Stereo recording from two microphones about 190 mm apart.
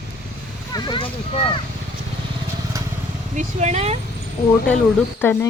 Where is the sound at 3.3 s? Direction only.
35° right (ahead or behind).